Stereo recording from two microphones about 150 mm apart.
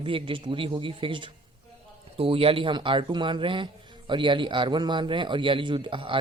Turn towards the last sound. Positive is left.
turn(degrees=-35)  # may be behind; listen again after turning